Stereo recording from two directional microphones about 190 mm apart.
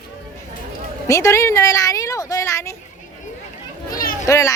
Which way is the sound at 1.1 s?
15° left (ahead or behind).